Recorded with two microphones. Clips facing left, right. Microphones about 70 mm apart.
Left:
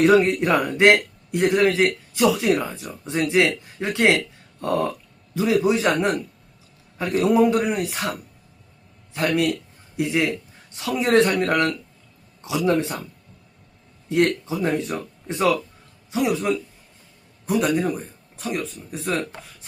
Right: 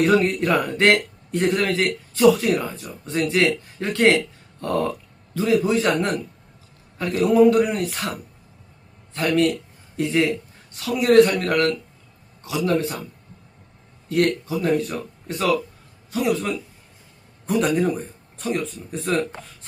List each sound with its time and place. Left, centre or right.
0.0 s a man's voice: centre
7.0 s speech: left
9.1 s speech: centre
10.8 s a man's voice: left
14.1 s speech: centre
17.4 s speech: centre